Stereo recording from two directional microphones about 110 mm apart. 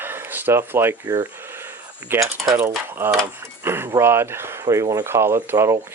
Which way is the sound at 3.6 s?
20° right (ahead or behind).